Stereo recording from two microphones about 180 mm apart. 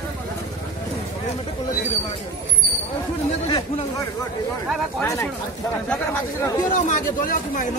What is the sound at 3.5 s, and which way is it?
A man's voice, 25° left (ahead or behind).